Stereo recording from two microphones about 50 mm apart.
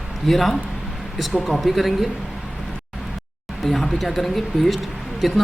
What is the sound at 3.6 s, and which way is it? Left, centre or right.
Speech, centre.